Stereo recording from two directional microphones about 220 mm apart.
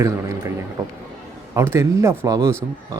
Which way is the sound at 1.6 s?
10° right (ahead or behind).